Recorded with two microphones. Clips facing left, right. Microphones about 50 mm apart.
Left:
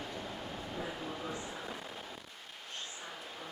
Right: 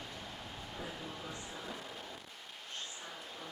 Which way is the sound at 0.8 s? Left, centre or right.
Centre.